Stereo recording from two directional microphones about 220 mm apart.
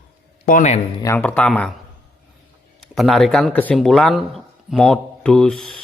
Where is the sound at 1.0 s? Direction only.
10° left (ahead or behind).